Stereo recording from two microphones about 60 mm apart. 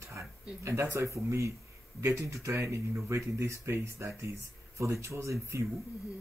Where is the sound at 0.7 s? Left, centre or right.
Right.